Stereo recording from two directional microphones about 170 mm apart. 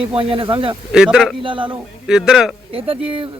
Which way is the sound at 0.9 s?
5° right (ahead or behind).